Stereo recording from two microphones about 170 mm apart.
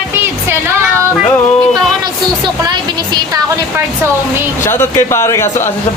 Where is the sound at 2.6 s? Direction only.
25° right (ahead or behind).